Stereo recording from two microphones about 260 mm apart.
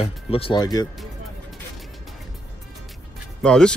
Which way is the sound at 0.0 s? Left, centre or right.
Left.